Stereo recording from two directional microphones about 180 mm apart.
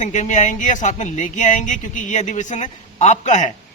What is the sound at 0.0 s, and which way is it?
Speech, 40° left (ahead or behind).